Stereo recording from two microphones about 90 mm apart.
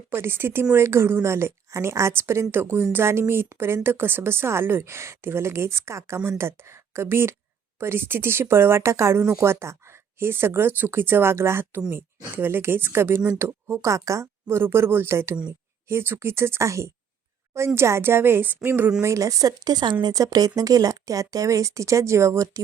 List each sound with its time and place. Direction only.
0.1 s a woman's voice: 25° right (ahead or behind)
19.0 s a woman's voice: 35° right (ahead or behind); by 20.1 s 55° right (ahead or behind)
20.1 s a woman's voice: 45° right (ahead or behind)